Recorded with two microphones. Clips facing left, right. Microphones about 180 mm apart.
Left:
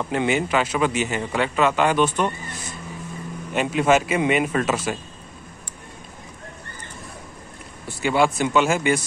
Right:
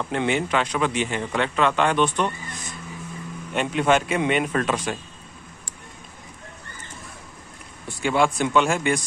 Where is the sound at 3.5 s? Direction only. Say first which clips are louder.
Left 2 dB; 5° left (ahead or behind).